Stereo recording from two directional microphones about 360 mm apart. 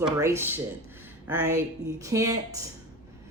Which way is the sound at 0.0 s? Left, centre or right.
Centre.